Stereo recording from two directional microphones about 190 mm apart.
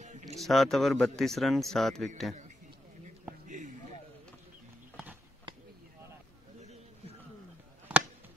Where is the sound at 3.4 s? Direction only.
40° right (ahead or behind).